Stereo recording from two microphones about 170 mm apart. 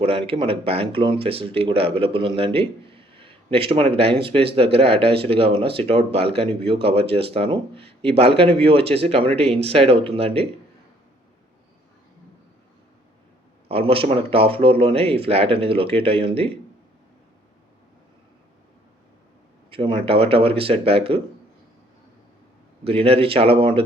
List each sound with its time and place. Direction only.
0.0 s speech: 35° right (ahead or behind)
13.7 s speech: 35° right (ahead or behind)
19.7 s speech: 30° right (ahead or behind)
22.8 s speech: 35° right (ahead or behind)